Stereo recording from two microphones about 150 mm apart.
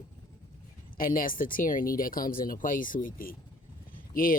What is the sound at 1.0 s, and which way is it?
Speech, 70° left (ahead or behind).